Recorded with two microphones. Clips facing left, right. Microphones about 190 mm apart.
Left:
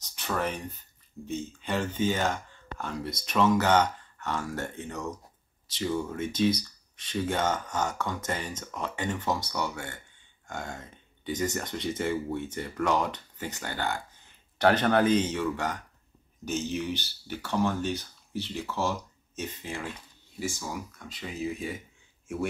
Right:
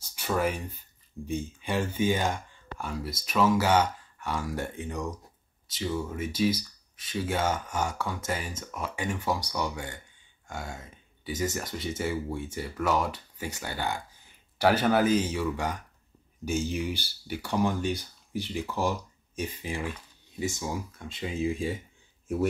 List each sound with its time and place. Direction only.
0.0 s a sound: 10° right (ahead or behind)
1.2 s speech: 10° right (ahead or behind)
5.7 s speech: centre (ahead or behind); by 21.7 s 30° right (ahead or behind)